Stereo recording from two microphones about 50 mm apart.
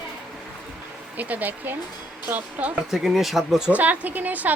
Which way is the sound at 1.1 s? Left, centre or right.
Right.